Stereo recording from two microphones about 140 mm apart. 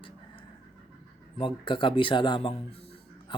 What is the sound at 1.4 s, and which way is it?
Speech, 35° left (ahead or behind).